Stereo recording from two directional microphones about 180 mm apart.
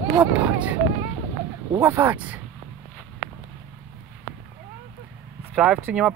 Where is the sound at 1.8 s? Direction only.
10° right (ahead or behind).